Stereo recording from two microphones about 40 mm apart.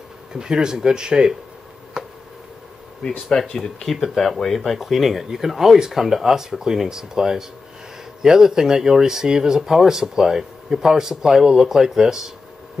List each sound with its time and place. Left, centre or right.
0.3 s speech: centre
2.0 s a sound: centre
3.0 s speech: centre